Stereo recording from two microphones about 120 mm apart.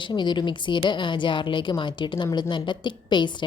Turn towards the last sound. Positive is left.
turn(degrees=40)  # may be behind; listen again after turning